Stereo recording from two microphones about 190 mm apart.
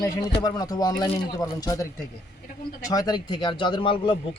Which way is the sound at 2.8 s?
20° left (ahead or behind).